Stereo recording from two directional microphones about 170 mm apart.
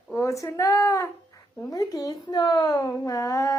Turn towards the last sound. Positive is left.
turn(degrees=20)  # may be behind; listen again after turning